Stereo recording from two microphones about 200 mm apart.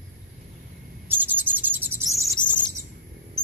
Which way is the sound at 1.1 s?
10° right (ahead or behind).